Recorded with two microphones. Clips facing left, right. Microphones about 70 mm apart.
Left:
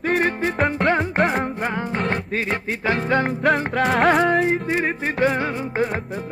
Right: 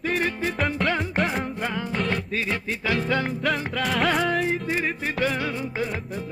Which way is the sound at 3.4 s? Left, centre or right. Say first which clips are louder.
Left 6 dB; left.